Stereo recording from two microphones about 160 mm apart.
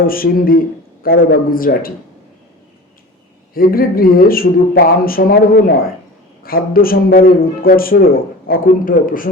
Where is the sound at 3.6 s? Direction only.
65° left (ahead or behind).